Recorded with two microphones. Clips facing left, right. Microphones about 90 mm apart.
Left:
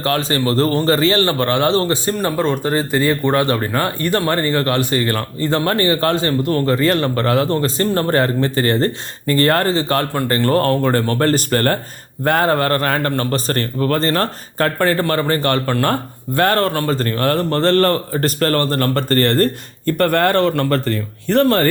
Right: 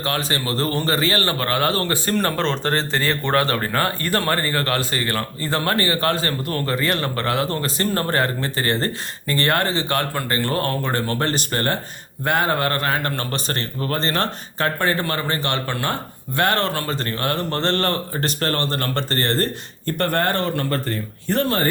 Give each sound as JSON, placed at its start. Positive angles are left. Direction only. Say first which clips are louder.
{"t": 0.0, "sound": "a man's voice", "louder": "left 6 dB", "side_deg": 35}